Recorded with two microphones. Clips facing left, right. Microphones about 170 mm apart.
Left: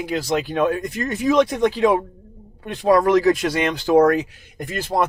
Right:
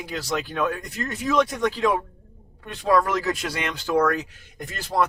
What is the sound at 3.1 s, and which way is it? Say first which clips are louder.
Speech: left 10 dB; 25° left (ahead or behind).